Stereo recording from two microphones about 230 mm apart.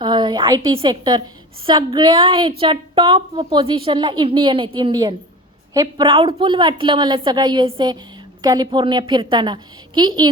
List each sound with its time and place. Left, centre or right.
0.0 s a woman's voice: centre